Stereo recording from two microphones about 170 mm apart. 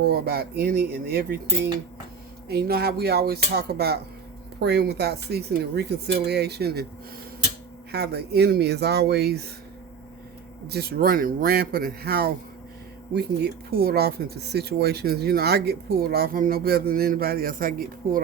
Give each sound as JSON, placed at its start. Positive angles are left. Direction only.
{"t": 0.0, "sound": "speech", "side_deg": -65}
{"t": 2.5, "sound": "speech", "side_deg": -70}
{"t": 7.9, "sound": "speech", "side_deg": -70}
{"t": 10.7, "sound": "speech", "side_deg": -70}